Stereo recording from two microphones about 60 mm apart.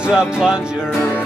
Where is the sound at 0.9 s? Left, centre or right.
Left.